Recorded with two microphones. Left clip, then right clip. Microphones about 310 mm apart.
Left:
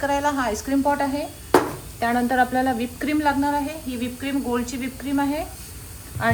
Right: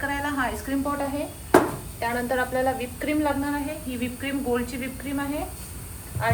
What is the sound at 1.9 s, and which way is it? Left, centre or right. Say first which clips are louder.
A woman's voice: left 6 dB; left.